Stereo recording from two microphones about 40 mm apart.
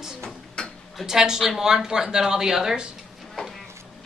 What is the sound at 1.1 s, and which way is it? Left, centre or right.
A woman's voice, centre.